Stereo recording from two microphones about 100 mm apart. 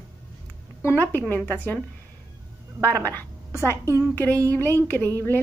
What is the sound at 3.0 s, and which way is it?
A woman's voice, 20° left (ahead or behind).